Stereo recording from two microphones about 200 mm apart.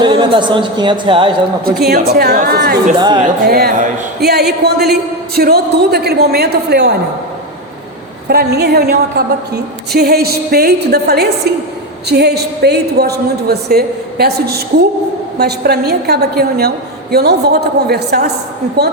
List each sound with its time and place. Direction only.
0.0 s a woman's voice: 25° right (ahead or behind)
1.6 s a woman's voice: 50° right (ahead or behind)
8.3 s a woman's voice: 50° right (ahead or behind)